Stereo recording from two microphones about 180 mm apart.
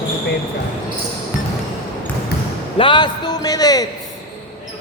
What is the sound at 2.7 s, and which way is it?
A man's voice, 30° left (ahead or behind).